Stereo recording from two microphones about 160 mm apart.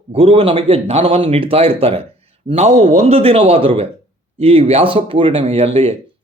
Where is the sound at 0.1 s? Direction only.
40° right (ahead or behind).